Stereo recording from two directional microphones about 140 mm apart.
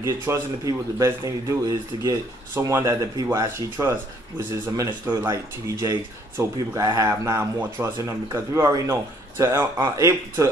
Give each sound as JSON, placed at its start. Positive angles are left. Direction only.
{"t": 0.0, "sound": "speech", "side_deg": -20}
{"t": 5.0, "sound": "speech", "side_deg": -15}